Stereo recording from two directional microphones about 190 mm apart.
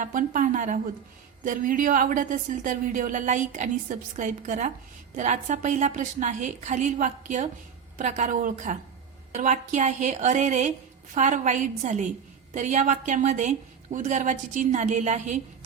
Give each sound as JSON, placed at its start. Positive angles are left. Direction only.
{"t": 0.0, "sound": "a woman's voice", "side_deg": -45}